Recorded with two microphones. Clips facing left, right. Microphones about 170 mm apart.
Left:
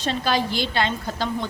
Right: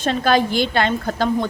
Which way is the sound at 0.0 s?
50° right (ahead or behind).